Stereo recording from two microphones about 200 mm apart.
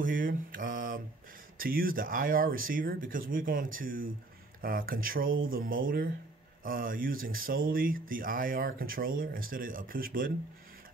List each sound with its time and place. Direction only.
0.0 s speech: 45° right (ahead or behind)